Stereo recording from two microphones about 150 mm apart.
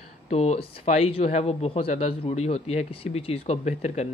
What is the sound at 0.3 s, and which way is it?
Speech, 45° left (ahead or behind).